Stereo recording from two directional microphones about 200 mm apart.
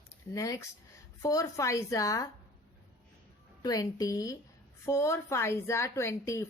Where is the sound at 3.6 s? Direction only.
20° left (ahead or behind).